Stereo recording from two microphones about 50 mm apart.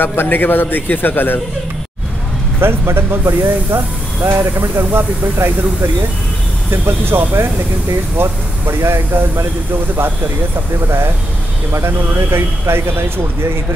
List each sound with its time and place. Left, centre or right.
0.0 s a man's voice: left
2.6 s speech: right
6.7 s speech: right
11.7 s speech: right